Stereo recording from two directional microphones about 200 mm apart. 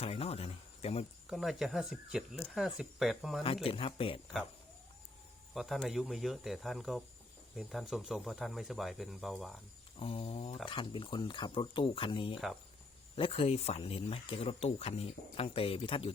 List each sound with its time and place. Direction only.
0.0 s speech: 30° left (ahead or behind)
1.3 s speech: centre (ahead or behind)
3.4 s speech: 30° left (ahead or behind)
5.5 s speech: centre (ahead or behind)
10.0 s speech: 25° left (ahead or behind)